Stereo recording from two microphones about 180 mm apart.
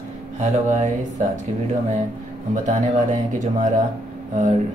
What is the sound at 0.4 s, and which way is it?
Speech, 40° right (ahead or behind).